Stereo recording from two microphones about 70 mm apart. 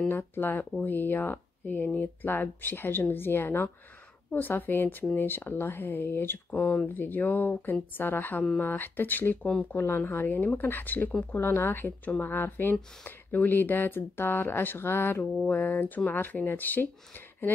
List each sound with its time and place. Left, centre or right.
0.1 s a woman's voice: left
9.8 s a woman's voice: left